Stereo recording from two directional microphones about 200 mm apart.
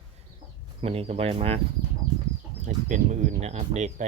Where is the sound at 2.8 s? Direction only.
40° right (ahead or behind).